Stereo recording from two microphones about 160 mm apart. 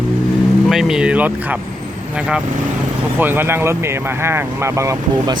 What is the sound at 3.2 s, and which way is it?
Speech, 15° right (ahead or behind).